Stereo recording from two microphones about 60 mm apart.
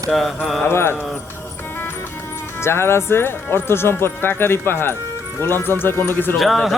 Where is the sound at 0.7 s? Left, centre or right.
Left.